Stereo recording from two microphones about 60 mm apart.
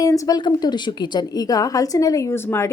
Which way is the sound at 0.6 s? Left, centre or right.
Left.